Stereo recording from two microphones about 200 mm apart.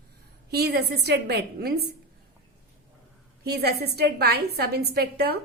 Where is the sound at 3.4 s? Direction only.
55° right (ahead or behind).